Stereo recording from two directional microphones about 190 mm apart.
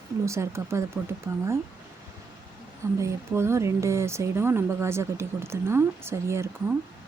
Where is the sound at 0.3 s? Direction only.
15° right (ahead or behind).